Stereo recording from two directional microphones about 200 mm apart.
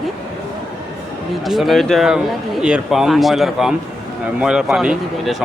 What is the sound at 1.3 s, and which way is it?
Speech, centre (ahead or behind).